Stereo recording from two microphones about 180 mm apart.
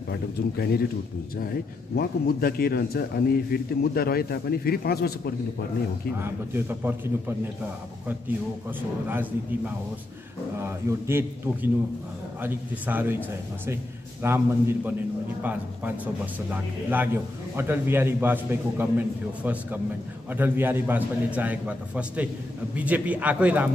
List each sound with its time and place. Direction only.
0.1 s a man's voice: 60° left (ahead or behind)
6.1 s a man's voice: 15° right (ahead or behind)
10.6 s a man's voice: 15° right (ahead or behind)
14.2 s a man's voice: 15° right (ahead or behind)